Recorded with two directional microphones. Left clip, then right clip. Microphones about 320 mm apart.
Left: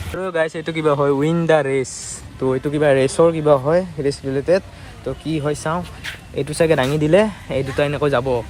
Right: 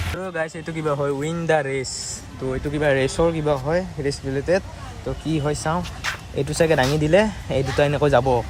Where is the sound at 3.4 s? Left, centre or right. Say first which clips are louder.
Left 7 dB; centre.